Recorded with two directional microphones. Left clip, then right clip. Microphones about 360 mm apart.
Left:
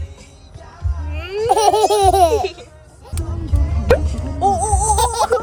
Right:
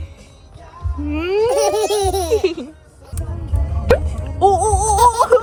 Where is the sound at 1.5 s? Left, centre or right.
Centre.